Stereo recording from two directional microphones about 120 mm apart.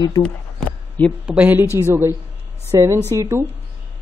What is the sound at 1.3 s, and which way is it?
A woman's voice, 15° right (ahead or behind).